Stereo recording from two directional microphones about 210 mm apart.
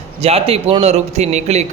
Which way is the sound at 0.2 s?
30° right (ahead or behind).